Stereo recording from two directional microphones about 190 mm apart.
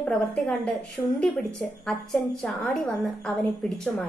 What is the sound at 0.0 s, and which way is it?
A woman's voice, 5° left (ahead or behind).